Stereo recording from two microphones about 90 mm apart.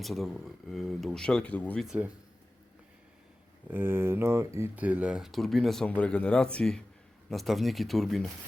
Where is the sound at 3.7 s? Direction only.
25° right (ahead or behind).